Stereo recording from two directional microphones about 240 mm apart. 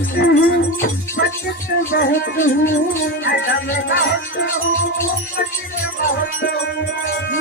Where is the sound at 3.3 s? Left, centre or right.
Left.